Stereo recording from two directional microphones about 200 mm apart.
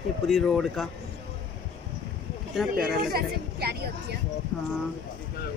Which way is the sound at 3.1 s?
50° right (ahead or behind).